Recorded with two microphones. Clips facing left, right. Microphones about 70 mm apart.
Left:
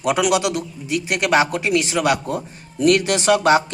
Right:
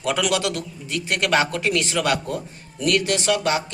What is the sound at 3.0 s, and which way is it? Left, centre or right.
Speech, left.